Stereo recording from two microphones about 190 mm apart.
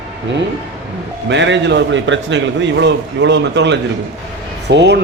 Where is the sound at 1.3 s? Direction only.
70° right (ahead or behind).